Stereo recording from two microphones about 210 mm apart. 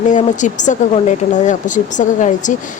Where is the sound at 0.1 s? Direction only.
35° left (ahead or behind).